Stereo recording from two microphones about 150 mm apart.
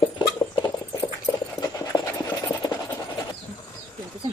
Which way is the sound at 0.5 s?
25° left (ahead or behind).